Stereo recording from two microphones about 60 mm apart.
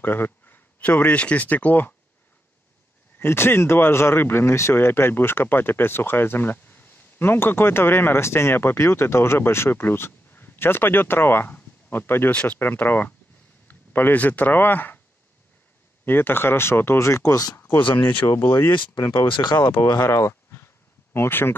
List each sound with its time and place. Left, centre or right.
0.0 s speech: left
3.2 s speech: left
16.1 s speech: left
17.0 s speech: left
17.6 s speech: left
19.0 s speech: left